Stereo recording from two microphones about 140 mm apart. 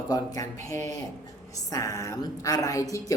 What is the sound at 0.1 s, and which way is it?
Speech, 25° left (ahead or behind).